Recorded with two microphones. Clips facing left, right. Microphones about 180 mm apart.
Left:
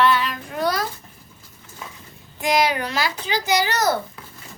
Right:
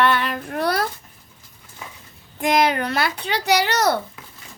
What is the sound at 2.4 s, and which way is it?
A child's voice, 55° right (ahead or behind).